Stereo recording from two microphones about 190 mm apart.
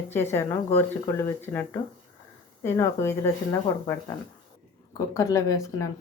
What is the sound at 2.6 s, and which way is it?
Speech, 15° left (ahead or behind).